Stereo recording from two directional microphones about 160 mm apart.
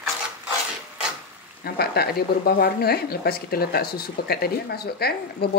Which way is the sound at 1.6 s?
80° left.